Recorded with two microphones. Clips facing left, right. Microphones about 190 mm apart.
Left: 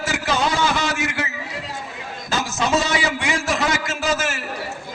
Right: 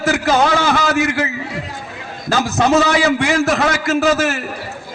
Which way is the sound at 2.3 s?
60° right (ahead or behind).